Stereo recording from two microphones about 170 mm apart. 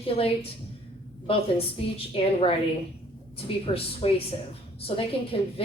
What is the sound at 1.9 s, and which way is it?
Speech, 35° left (ahead or behind).